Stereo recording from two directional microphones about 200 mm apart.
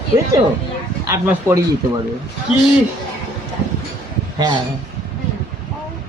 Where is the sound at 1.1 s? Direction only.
15° right (ahead or behind).